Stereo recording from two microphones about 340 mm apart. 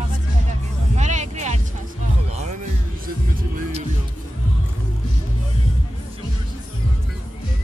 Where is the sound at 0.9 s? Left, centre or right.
Right.